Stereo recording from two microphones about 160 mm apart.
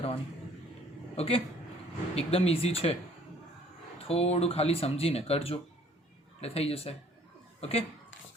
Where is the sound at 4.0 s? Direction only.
40° left (ahead or behind).